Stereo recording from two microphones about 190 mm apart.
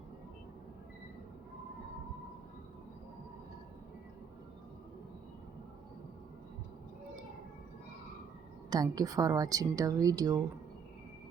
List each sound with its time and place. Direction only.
8.7 s speech: 20° right (ahead or behind)